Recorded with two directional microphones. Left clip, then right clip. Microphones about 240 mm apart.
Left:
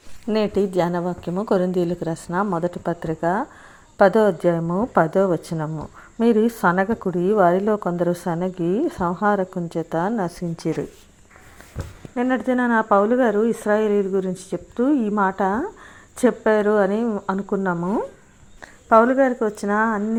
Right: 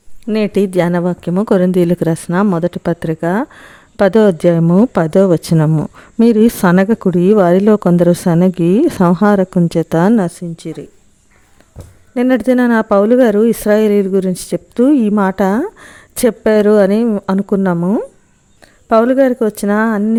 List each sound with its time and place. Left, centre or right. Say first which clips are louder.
0.3 s speech: right 6 dB; right
10.6 s speech: left 3 dB; centre
12.1 s speech: right 9 dB; right